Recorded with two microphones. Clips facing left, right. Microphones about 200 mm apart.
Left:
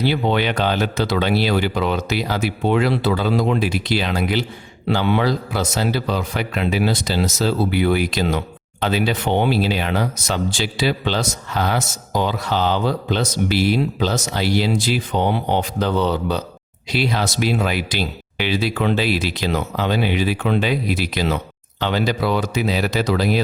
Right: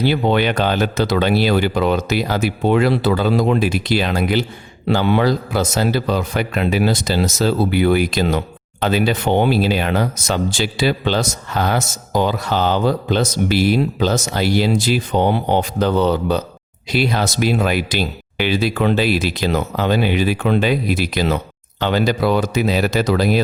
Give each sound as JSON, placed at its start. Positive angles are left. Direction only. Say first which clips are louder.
{"t": 0.0, "sound": "speech", "louder": "right 3 dB", "side_deg": -50}